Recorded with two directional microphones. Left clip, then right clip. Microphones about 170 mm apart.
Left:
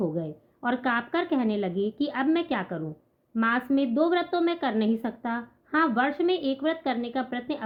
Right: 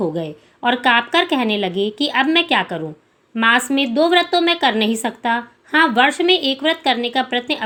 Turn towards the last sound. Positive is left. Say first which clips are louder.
# right 11 dB
turn(degrees=-15)  # may be behind; listen again after turning